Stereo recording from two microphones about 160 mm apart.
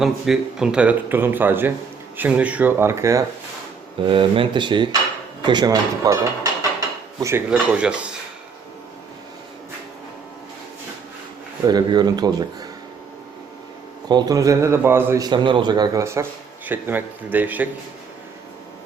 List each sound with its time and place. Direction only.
0.0 s a man's voice: 5° right (ahead or behind)
4.0 s a man's voice: 30° right (ahead or behind)
5.4 s dishes: 25° right (ahead or behind)
7.5 s a man's voice: 5° right (ahead or behind)
11.7 s a man's voice: 25° right (ahead or behind)
14.1 s a man's voice: 25° right (ahead or behind)
15.3 s a man's voice: 30° right (ahead or behind); by 17.7 s 10° right (ahead or behind)